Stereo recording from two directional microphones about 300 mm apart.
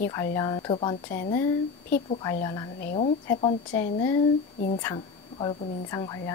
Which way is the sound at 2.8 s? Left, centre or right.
Left.